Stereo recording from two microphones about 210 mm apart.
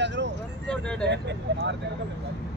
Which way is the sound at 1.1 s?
55° right (ahead or behind).